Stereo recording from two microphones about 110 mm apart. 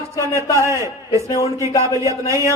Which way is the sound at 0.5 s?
25° right (ahead or behind).